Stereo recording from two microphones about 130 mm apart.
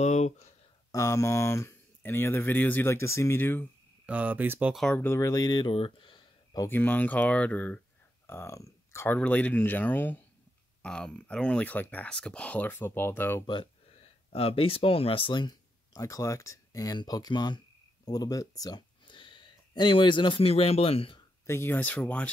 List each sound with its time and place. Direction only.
0.0 s speech: 60° left (ahead or behind)
0.9 s speech: 20° left (ahead or behind)
4.0 s speech: 10° right (ahead or behind)
4.9 s speech: 20° left (ahead or behind); by 6.2 s 40° left (ahead or behind)
6.7 s speech: 15° left (ahead or behind)
8.3 s speech: 20° left (ahead or behind)
13.5 s speech: 45° left (ahead or behind)
21.5 s speech: 15° left (ahead or behind)